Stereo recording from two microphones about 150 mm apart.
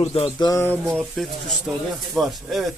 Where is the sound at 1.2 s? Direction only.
Centre (ahead or behind).